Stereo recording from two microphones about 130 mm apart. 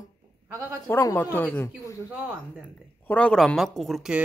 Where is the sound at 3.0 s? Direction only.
10° left (ahead or behind).